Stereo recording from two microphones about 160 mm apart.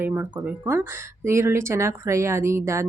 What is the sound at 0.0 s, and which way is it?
Speech, 15° right (ahead or behind).